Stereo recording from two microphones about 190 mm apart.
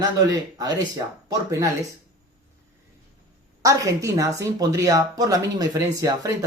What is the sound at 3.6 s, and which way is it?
Speech, 15° right (ahead or behind).